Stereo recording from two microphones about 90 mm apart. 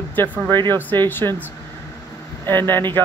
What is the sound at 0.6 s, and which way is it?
Speech, 25° left (ahead or behind).